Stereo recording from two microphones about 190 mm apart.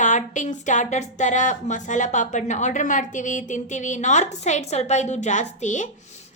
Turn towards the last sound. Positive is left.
turn(degrees=40)  # may be behind; listen again after turning